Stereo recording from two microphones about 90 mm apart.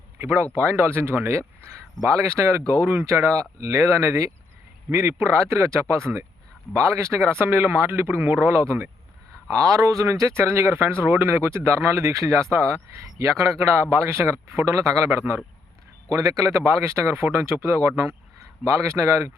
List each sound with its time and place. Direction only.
0.2 s a man's voice: 25° right (ahead or behind)
16.0 s speech: 40° right (ahead or behind)
18.9 s speech: 30° right (ahead or behind)